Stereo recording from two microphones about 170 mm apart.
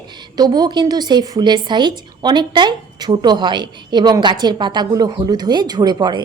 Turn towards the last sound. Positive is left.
turn(degrees=-25)  # may be behind; listen again after turning